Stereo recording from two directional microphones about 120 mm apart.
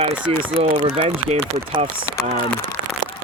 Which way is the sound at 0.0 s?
55° right (ahead or behind).